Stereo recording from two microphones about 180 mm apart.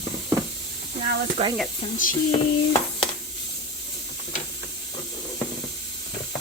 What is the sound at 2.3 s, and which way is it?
Speech, 25° left (ahead or behind).